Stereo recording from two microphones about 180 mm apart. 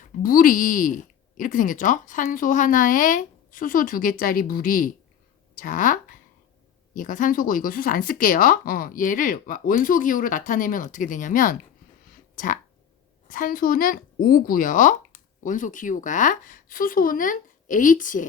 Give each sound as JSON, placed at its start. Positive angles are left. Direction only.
{"t": 0.2, "sound": "speech", "side_deg": 50}
{"t": 13.2, "sound": "speech", "side_deg": 50}